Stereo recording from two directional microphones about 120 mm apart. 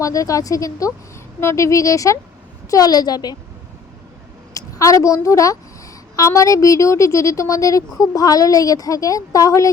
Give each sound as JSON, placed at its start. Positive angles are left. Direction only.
{"t": 0.0, "sound": "a woman's voice", "side_deg": 30}
{"t": 4.5, "sound": "a woman's voice", "side_deg": 25}